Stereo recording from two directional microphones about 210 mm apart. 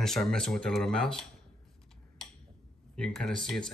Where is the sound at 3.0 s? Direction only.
Centre (ahead or behind).